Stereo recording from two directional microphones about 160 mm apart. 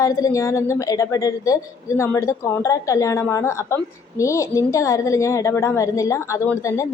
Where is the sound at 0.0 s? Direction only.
20° left (ahead or behind).